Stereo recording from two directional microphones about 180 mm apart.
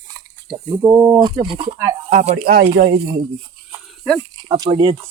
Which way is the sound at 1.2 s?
25° right (ahead or behind).